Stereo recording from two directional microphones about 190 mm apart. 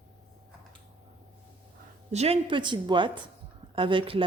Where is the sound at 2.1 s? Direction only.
30° right (ahead or behind).